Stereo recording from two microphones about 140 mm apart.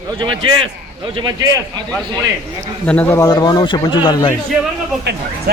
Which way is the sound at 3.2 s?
30° left (ahead or behind).